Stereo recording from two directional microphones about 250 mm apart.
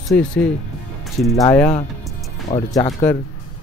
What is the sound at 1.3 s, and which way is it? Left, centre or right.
Speech, centre.